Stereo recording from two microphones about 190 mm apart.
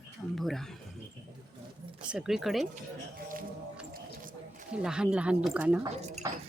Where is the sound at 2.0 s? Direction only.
5° right (ahead or behind).